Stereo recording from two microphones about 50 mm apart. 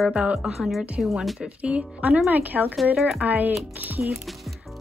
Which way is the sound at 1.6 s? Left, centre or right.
Right.